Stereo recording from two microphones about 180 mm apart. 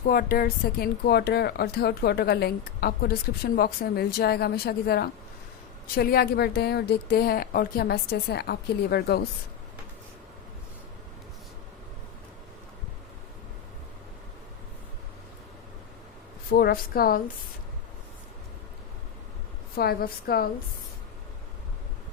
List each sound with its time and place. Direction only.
0.0 s speech: 50° left (ahead or behind)
16.5 s speech: 55° left (ahead or behind)
19.7 s speech: 60° left (ahead or behind)